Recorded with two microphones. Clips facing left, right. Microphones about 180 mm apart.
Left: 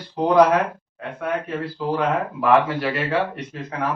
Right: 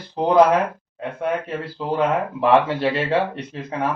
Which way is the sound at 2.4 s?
30° right (ahead or behind).